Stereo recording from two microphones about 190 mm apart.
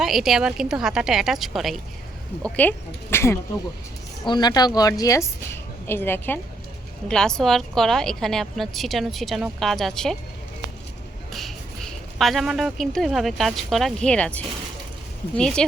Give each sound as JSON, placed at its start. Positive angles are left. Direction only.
{"t": 0.0, "sound": "a woman's voice", "side_deg": 0}
{"t": 11.3, "sound": "a sound", "side_deg": 0}
{"t": 12.2, "sound": "a woman's voice", "side_deg": 0}